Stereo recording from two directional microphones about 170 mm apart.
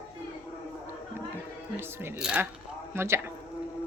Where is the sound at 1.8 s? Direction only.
15° right (ahead or behind).